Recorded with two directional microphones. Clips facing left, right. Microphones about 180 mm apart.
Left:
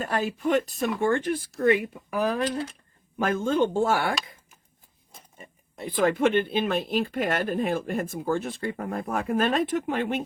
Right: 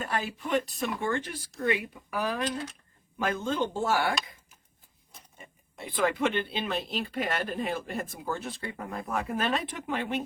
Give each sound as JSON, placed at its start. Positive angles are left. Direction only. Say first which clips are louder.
{"t": 0.0, "sound": "speech", "louder": "left 6 dB", "side_deg": 45}
{"t": 5.8, "sound": "speech", "louder": "left 5 dB", "side_deg": 45}